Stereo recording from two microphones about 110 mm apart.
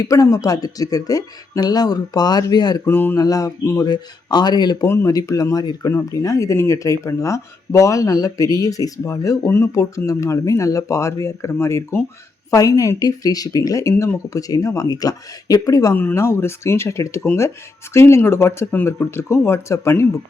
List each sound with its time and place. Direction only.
0.0 s speech: 30° left (ahead or behind)
2.8 s speech: 20° left (ahead or behind)
3.2 s speech: 35° left (ahead or behind)
3.8 s speech: 40° left (ahead or behind)
4.9 s speech: 30° left (ahead or behind)
13.9 s speech: 15° left (ahead or behind)
14.3 s speech: 35° left (ahead or behind)
16.0 s speech: 20° left (ahead or behind)